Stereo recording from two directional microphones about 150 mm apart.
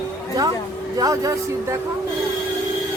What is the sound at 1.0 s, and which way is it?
Speech, 25° right (ahead or behind).